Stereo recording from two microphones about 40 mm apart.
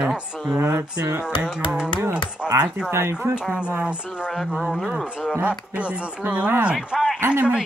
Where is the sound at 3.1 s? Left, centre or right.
Right.